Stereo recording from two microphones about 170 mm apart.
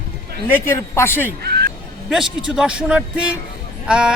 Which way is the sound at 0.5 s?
15° left (ahead or behind).